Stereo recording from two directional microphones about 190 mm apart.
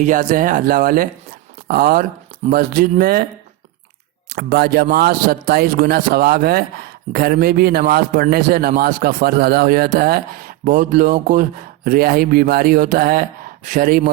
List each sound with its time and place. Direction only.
0.0 s speech: 45° right (ahead or behind)
4.4 s speech: 60° right (ahead or behind)